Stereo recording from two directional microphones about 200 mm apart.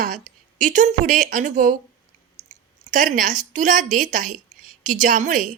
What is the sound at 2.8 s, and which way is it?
A woman's voice, 40° right (ahead or behind).